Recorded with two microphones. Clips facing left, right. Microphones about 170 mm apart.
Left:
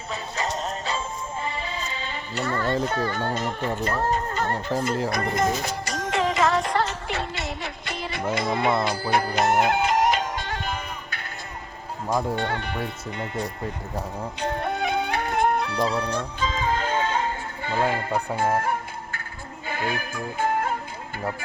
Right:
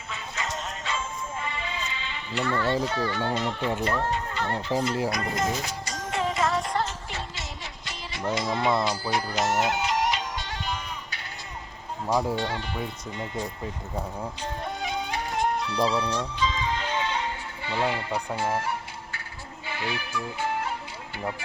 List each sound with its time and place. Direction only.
0.1 s music: 35° left (ahead or behind)
2.8 s speech: 50° left (ahead or behind)
5.1 s music: 55° left (ahead or behind)
8.4 s speech: 60° left (ahead or behind)
8.8 s music: 55° left (ahead or behind)
12.4 s speech: 55° left (ahead or behind)
14.4 s music: 60° left (ahead or behind)